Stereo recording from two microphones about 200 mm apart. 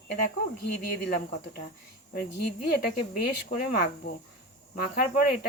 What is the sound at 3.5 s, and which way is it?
A woman's voice, 50° left (ahead or behind).